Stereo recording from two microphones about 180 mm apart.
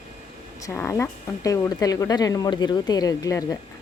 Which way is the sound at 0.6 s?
15° left (ahead or behind).